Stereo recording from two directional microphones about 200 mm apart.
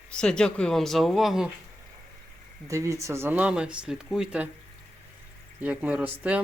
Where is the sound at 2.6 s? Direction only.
15° right (ahead or behind).